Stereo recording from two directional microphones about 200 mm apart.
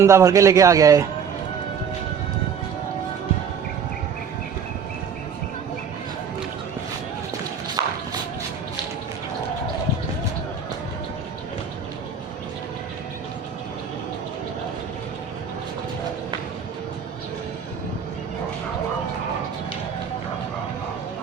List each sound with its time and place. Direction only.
0.0 s speech: 15° right (ahead or behind)
7.8 s shuffle: 15° right (ahead or behind)